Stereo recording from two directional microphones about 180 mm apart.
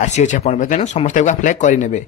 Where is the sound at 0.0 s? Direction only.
40° left (ahead or behind).